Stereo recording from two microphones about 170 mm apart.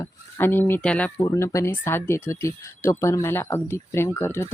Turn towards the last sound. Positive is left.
turn(degrees=15)  # may be behind; listen again after turning